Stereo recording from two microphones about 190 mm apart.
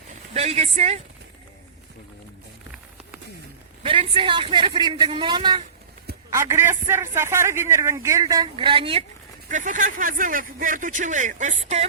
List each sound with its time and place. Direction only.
0.1 s speech: 35° right (ahead or behind)
3.8 s a man's voice: 30° right (ahead or behind)
9.5 s speech: 40° right (ahead or behind)